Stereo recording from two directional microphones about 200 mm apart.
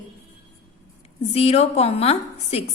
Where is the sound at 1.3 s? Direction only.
30° left (ahead or behind).